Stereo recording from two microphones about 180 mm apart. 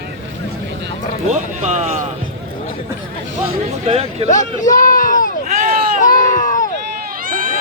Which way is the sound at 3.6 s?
35° right (ahead or behind).